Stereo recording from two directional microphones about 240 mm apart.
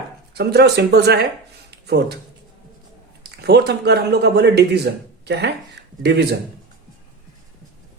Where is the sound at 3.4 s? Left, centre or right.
Right.